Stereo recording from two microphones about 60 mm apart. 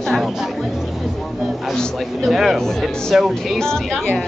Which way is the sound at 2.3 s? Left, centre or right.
Centre.